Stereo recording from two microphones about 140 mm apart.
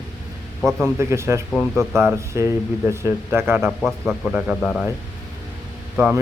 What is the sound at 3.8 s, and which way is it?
Speech, centre (ahead or behind).